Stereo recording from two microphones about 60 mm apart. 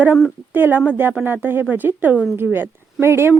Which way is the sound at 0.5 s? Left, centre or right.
Right.